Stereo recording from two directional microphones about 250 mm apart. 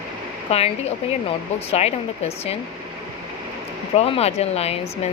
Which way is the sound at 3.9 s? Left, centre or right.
Left.